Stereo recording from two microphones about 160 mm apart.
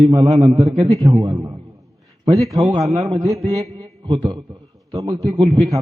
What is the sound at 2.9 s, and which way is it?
A man's voice, 40° right (ahead or behind).